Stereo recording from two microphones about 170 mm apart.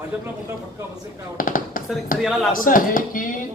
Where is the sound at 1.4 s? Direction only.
55° left (ahead or behind).